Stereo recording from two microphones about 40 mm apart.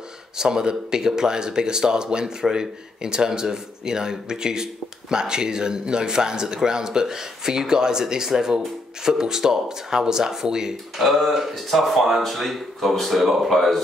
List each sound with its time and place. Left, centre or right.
0.4 s speech: centre
11.0 s speech: centre